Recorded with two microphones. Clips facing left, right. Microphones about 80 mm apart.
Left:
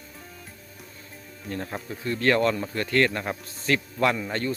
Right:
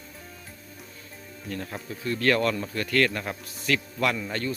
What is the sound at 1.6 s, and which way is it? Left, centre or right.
Speech, left.